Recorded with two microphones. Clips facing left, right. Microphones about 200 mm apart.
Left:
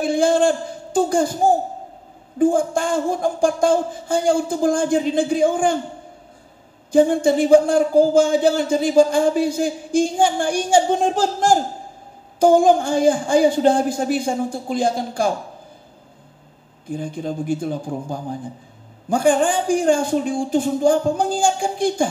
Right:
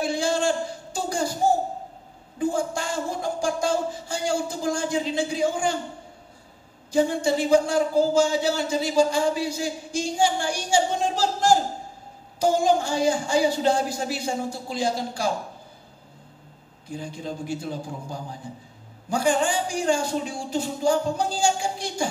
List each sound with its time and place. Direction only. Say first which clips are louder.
0.0 s a sound: left 7 dB; 55° left (ahead or behind)
2.3 s speech: left 8 dB; 50° left (ahead or behind)
6.9 s speech: left 7 dB; 55° left (ahead or behind)
16.9 s speech: left 7 dB; 50° left (ahead or behind)